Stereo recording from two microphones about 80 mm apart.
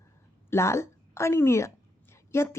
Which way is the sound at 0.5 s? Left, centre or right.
Left.